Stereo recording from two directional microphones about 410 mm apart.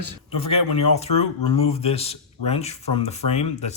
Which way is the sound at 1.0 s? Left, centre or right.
Centre.